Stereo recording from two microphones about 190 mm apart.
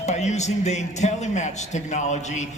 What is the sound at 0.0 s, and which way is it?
A man's voice, 35° left (ahead or behind).